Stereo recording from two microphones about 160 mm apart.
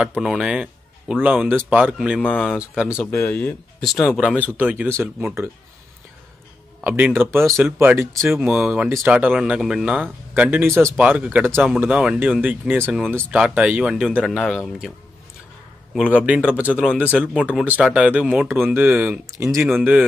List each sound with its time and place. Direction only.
0.0 s speech: 5° right (ahead or behind)
2.2 s speech: 10° left (ahead or behind)
2.5 s speech: 5° right (ahead or behind)
3.1 s speech: 10° left (ahead or behind); by 5.1 s 15° right (ahead or behind)
6.8 s speech: 10° right (ahead or behind)
7.4 s speech: centre (ahead or behind)
7.8 s speech: 15° right (ahead or behind)
8.1 s speech: centre (ahead or behind)
12.8 s speech: 5° left (ahead or behind)
15.9 s speech: 5° right (ahead or behind)
19.6 s speech: 5° right (ahead or behind)